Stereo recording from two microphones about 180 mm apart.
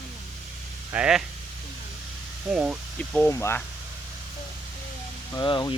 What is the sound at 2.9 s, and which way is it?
Speech, 10° left (ahead or behind).